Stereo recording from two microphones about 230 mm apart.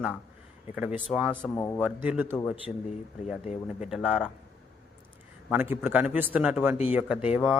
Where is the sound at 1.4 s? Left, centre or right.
Centre.